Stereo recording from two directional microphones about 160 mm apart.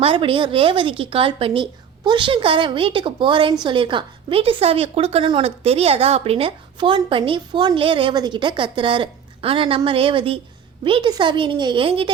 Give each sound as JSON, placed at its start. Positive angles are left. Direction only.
{"t": 0.0, "sound": "a woman's voice", "side_deg": -35}